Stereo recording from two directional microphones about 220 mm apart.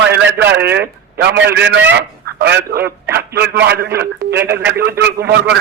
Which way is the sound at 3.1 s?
50° right (ahead or behind).